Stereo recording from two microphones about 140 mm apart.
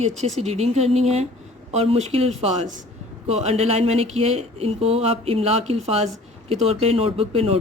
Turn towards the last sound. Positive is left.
turn(degrees=-45)  # may be behind; listen again after turning